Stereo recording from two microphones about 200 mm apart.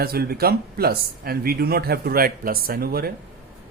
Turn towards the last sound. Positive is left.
turn(degrees=-50)  # may be behind; listen again after turning